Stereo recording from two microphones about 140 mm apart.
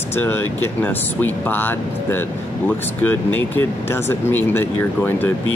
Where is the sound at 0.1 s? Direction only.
15° left (ahead or behind).